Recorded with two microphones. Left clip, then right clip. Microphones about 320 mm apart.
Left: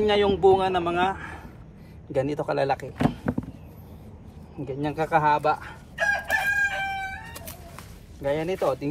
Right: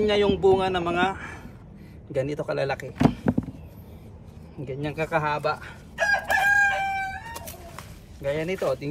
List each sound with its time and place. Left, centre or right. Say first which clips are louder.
0.0 s a man's voice: left 1 dB; centre
3.1 s a sound: right 3 dB; centre
4.6 s speech: left 2 dB; centre
5.9 s chicken: right 2 dB; right
8.2 s speech: left 1 dB; centre